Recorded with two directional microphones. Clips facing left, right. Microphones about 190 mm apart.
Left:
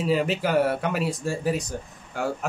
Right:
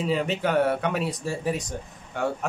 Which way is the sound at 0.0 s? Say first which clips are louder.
Left 1 dB; 5° left (ahead or behind).